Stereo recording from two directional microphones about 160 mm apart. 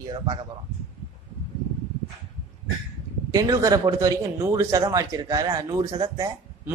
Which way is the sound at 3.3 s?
20° right (ahead or behind).